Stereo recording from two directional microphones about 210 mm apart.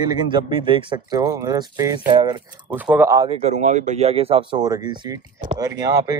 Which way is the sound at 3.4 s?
35° right (ahead or behind).